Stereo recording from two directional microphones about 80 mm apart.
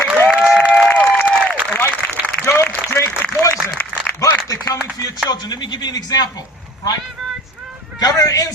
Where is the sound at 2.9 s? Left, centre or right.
Left.